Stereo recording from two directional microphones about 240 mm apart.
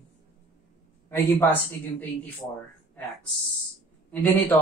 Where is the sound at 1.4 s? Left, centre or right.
Centre.